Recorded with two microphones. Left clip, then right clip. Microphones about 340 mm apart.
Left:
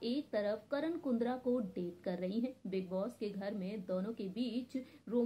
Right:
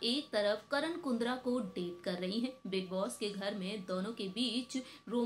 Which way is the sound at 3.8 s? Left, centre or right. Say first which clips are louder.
Left 1 dB; right.